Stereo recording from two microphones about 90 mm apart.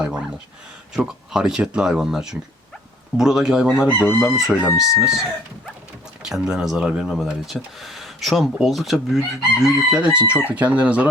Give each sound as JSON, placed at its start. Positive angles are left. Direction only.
{"t": 0.0, "sound": "a sound", "side_deg": -10}
{"t": 0.9, "sound": "speech", "side_deg": -5}
{"t": 4.5, "sound": "speech", "side_deg": 25}
{"t": 4.9, "sound": "speech", "side_deg": -5}
{"t": 6.2, "sound": "speech", "side_deg": -10}